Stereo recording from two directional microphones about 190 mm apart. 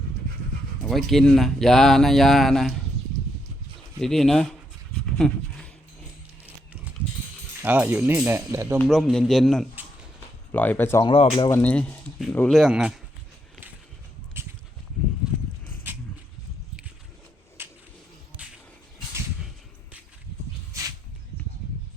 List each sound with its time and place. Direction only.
0.8 s speech: centre (ahead or behind)
4.0 s speech: centre (ahead or behind)
5.1 s roaring cats: 5° left (ahead or behind)
7.6 s speech: 10° right (ahead or behind)
8.8 s speech: centre (ahead or behind)
11.0 s speech: 25° left (ahead or behind)
11.5 s speech: 10° left (ahead or behind)
14.4 s a sound: 10° right (ahead or behind)
17.6 s a sound: 10° right (ahead or behind)
20.7 s a sound: 15° right (ahead or behind)